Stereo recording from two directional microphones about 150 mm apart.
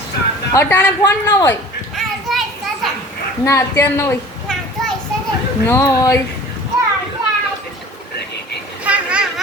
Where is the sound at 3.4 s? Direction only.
20° left (ahead or behind).